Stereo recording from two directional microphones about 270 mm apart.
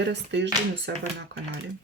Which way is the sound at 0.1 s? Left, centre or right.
Right.